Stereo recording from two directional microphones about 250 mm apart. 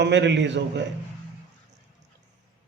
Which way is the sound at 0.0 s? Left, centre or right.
Right.